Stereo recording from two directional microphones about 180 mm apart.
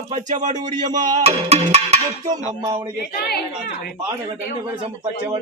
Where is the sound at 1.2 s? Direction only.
35° right (ahead or behind).